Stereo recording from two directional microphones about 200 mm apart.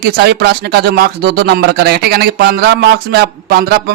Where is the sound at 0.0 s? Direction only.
55° right (ahead or behind).